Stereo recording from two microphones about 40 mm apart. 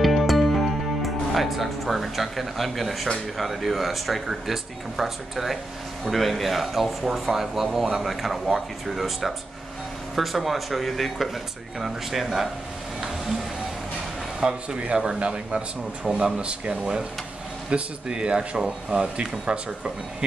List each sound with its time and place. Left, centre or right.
0.0 s music: centre
3.3 s speech: centre
14.4 s speech: centre
16.1 s speech: centre
16.3 s speech: right